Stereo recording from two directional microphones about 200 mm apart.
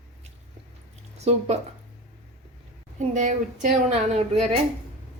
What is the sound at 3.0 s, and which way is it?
Speech, 35° right (ahead or behind).